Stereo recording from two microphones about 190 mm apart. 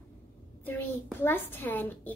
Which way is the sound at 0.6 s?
10° left (ahead or behind).